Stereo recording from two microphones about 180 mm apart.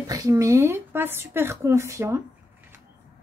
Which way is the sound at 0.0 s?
20° right (ahead or behind).